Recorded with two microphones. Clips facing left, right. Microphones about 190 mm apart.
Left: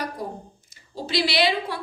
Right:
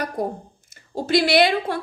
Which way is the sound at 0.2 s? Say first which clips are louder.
Right 7 dB; 50° right (ahead or behind).